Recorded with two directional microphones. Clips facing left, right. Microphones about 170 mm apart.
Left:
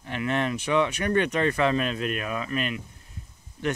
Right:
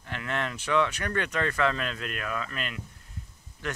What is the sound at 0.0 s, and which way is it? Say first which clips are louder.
Speech: left 6 dB; 20° left (ahead or behind).